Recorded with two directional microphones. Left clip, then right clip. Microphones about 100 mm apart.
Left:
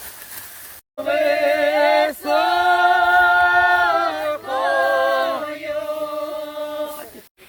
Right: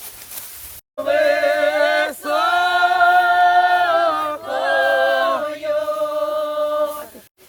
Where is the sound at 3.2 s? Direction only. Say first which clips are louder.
Right 1 dB; 5° left (ahead or behind).